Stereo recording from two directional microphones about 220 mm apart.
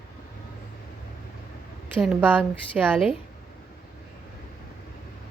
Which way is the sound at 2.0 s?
5° right (ahead or behind).